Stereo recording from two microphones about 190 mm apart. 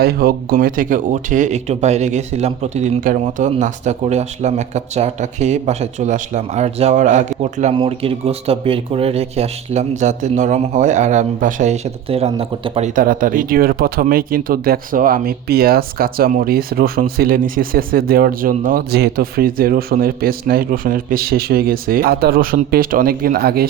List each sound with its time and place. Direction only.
0.0 s speech: 55° right (ahead or behind); by 12.9 s 30° right (ahead or behind)
13.0 s speech: 45° right (ahead or behind)